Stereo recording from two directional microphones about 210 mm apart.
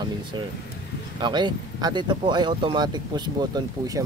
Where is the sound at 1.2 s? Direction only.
20° right (ahead or behind).